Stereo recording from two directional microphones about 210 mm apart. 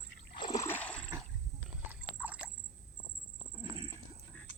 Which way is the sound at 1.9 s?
5° right (ahead or behind).